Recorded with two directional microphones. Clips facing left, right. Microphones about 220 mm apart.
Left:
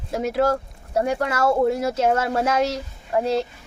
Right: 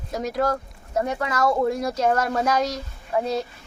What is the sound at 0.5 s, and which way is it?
Speech, 30° left (ahead or behind).